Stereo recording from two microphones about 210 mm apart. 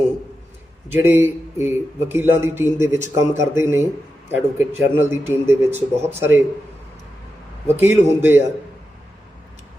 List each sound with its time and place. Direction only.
0.9 s a man's voice: 10° right (ahead or behind)
7.8 s a man's voice: 10° right (ahead or behind)